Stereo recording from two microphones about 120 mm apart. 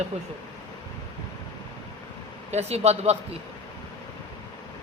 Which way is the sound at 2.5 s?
65° right (ahead or behind).